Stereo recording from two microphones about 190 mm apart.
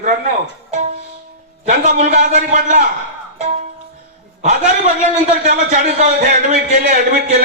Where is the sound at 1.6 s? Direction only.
40° right (ahead or behind).